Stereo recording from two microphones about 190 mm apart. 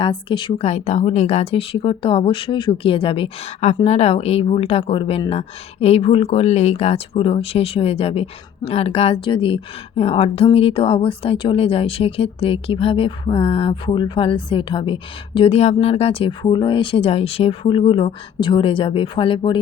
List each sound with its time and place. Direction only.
0.0 s a woman's voice: 25° left (ahead or behind)